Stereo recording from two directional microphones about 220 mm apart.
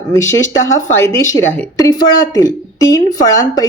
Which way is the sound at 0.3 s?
60° left (ahead or behind).